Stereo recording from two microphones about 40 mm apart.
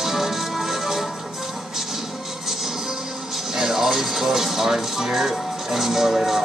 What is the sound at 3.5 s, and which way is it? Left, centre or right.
Speech, centre.